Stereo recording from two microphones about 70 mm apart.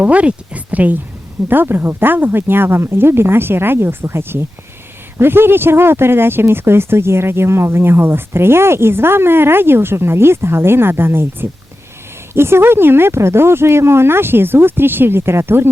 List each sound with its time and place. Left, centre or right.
0.0 s speech: centre